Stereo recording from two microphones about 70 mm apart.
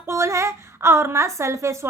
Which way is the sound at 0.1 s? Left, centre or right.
Right.